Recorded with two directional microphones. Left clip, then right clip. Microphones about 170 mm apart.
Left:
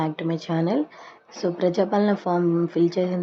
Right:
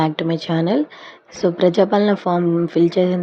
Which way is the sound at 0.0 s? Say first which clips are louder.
Right 7 dB; 25° right (ahead or behind).